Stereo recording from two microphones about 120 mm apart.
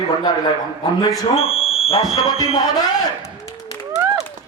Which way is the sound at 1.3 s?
55° left (ahead or behind).